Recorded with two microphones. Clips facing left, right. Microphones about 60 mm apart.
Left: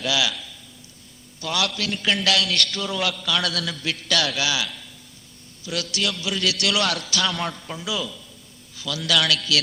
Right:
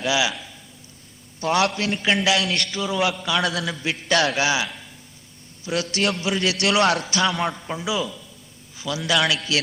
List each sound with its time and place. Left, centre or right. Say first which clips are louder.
0.0 s a man's voice: right 2 dB; right
1.4 s a man's voice: right 6 dB; right
2.1 s a man's voice: right 1 dB; centre
3.0 s a man's voice: right 3 dB; right
3.4 s a man's voice: right 3 dB; centre
3.8 s a man's voice: right 5 dB; right
4.6 s a sound: right 2 dB; right
5.6 s a man's voice: right 4 dB; right
6.0 s a man's voice: right 3 dB; right
6.7 s a man's voice: right 7 dB; right
7.3 s a man's voice: right 3 dB; centre
7.9 s a man's voice: right 2 dB; centre
8.7 s a man's voice: right 1 dB; right